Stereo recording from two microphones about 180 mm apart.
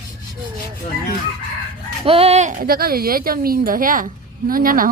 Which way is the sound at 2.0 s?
35° right (ahead or behind).